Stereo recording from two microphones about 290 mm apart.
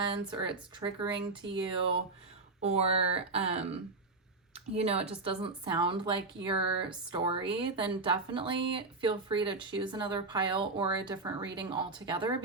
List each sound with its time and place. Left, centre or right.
0.0 s speech: centre
2.6 s speech: right
4.8 s speech: right